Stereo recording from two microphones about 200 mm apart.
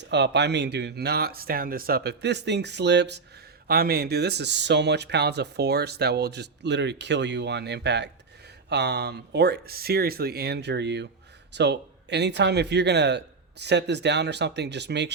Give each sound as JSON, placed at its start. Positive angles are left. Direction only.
{"t": 0.1, "sound": "speech", "side_deg": -60}